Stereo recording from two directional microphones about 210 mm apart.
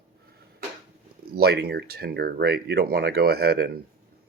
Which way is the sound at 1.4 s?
50° right (ahead or behind).